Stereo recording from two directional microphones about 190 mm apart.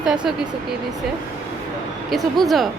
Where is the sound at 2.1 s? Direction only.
Centre (ahead or behind).